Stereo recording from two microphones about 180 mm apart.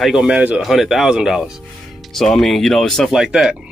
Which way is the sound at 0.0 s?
5° right (ahead or behind).